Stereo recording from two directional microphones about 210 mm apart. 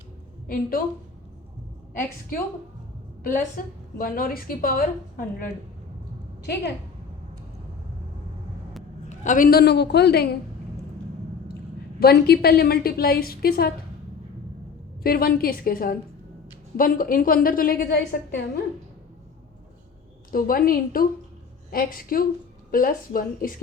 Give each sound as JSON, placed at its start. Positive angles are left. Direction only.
{"t": 0.4, "sound": "a woman's voice", "side_deg": 45}
{"t": 3.6, "sound": "a woman's voice", "side_deg": 40}
{"t": 6.4, "sound": "a woman's voice", "side_deg": 50}
{"t": 9.0, "sound": "a woman's voice", "side_deg": 35}
{"t": 11.9, "sound": "a woman's voice", "side_deg": 50}
{"t": 15.0, "sound": "a woman's voice", "side_deg": 45}
{"t": 20.3, "sound": "a woman's voice", "side_deg": 45}